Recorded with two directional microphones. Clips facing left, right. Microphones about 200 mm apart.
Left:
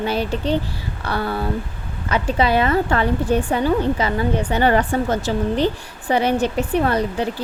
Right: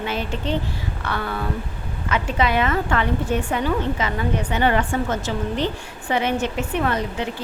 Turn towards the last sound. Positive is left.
turn(degrees=35)  # may be behind; listen again after turning